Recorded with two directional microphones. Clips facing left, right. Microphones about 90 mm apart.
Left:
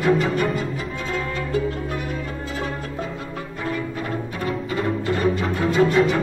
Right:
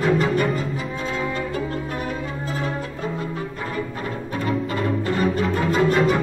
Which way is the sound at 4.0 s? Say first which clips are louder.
Even; 40° right (ahead or behind).